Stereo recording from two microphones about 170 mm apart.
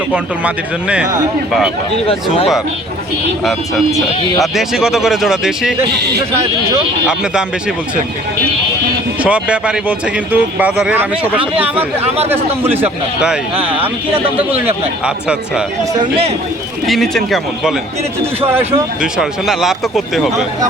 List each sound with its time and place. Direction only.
0.1 s a man's voice: 5° right (ahead or behind)
3.9 s speech: centre (ahead or behind)
9.2 s a man's voice: 5° right (ahead or behind)
12.0 s a man's voice: 40° right (ahead or behind)
12.3 s a man's voice: 10° right (ahead or behind)
16.8 s speech: centre (ahead or behind)
19.1 s speech: 5° right (ahead or behind)